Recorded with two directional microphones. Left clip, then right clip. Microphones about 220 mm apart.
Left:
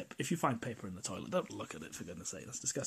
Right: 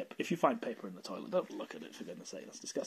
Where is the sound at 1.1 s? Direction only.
25° left (ahead or behind).